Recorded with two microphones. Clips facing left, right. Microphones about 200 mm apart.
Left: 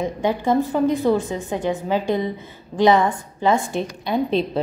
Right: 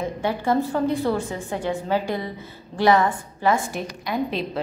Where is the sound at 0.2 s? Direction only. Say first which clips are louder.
Left 3 dB; 15° left (ahead or behind).